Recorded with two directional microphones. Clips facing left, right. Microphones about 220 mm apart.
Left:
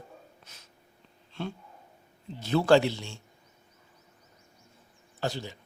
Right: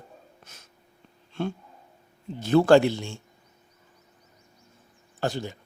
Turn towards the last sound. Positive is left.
turn(degrees=-50)  # may be behind; listen again after turning